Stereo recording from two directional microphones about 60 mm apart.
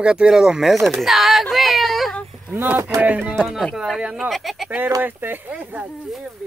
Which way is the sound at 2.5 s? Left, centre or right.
Right.